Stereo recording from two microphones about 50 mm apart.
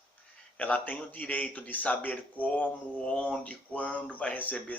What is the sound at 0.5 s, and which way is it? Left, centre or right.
A man's voice, left.